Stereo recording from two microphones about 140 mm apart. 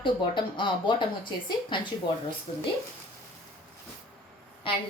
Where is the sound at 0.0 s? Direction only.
35° left (ahead or behind).